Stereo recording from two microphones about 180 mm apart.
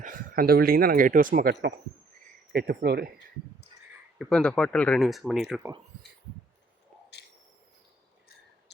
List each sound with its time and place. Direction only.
0.0 s speech: 50° right (ahead or behind)
4.2 s speech: 5° left (ahead or behind)